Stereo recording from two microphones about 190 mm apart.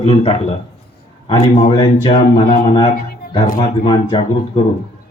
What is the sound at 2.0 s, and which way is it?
Speech, 25° left (ahead or behind).